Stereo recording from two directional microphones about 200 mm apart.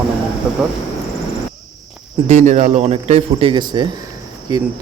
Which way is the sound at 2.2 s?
35° right (ahead or behind).